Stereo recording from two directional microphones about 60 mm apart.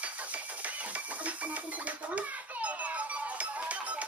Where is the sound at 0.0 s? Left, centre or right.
Right.